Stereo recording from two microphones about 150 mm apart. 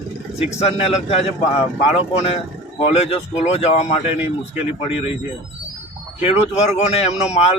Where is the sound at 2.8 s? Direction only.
45° left (ahead or behind).